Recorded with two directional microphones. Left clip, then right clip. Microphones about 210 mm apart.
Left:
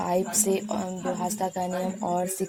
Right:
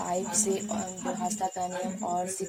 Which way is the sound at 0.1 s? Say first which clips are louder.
Left 4 dB; 45° left (ahead or behind).